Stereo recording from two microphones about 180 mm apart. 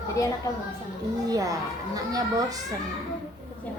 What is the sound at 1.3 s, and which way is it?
Speech, 20° right (ahead or behind).